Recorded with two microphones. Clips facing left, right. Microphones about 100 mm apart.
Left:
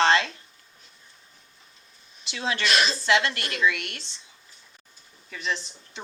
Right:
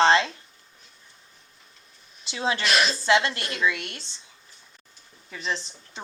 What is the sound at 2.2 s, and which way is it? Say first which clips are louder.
Speech: right 1 dB; 30° right (ahead or behind).